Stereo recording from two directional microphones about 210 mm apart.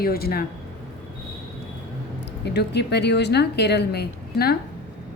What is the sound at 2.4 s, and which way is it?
A woman's voice, 55° left (ahead or behind).